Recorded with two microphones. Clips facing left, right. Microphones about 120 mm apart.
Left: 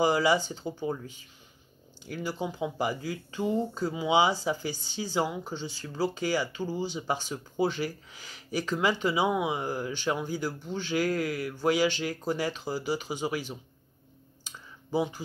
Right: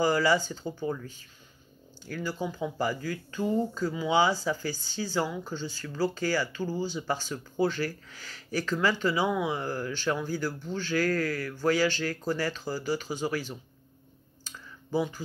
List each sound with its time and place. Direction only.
0.0 s speech: 20° left (ahead or behind)
2.0 s speech: 20° left (ahead or behind)
14.4 s clicking: 20° left (ahead or behind)